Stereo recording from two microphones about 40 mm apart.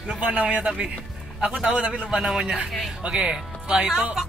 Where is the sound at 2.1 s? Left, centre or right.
Centre.